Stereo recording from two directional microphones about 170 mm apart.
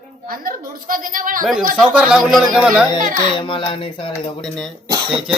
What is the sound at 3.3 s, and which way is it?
Speech, 30° left (ahead or behind).